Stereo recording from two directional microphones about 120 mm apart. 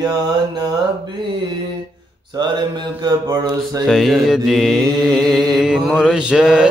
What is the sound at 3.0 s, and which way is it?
Mantra, 30° right (ahead or behind).